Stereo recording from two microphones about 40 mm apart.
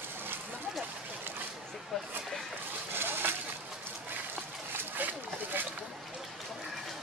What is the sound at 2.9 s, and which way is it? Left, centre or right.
Splash, right.